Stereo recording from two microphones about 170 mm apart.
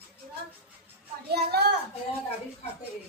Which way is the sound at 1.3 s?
70° right (ahead or behind).